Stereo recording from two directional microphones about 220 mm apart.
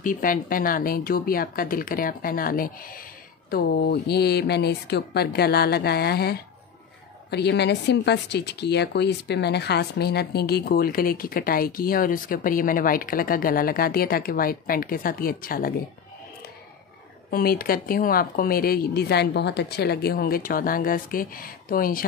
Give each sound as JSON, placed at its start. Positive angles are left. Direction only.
{"t": 0.0, "sound": "a woman's voice", "side_deg": 40}
{"t": 17.3, "sound": "a woman's voice", "side_deg": 45}